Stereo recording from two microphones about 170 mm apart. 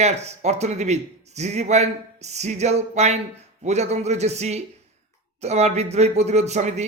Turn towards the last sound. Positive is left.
turn(degrees=-40)  # may be behind; listen again after turning